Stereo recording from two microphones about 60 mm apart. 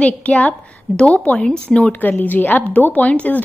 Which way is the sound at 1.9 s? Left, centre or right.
Left.